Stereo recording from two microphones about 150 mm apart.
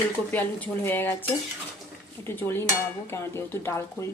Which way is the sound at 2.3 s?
15° left (ahead or behind).